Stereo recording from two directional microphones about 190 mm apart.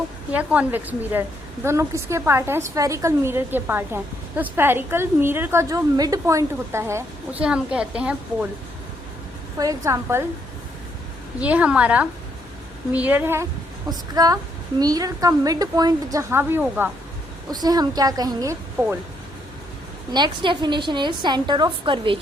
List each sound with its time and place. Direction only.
0.3 s a woman's voice: 10° right (ahead or behind)
9.6 s a woman's voice: 15° right (ahead or behind)
11.3 s a woman's voice: 5° right (ahead or behind)
17.5 s a woman's voice: 20° right (ahead or behind)
20.1 s a woman's voice: 25° right (ahead or behind)